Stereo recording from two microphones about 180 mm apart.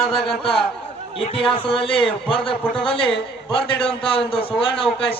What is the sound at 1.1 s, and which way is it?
A man's voice, 30° left (ahead or behind).